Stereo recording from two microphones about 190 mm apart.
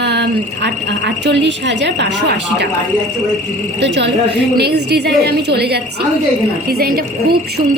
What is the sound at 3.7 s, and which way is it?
A woman's voice, 65° right (ahead or behind).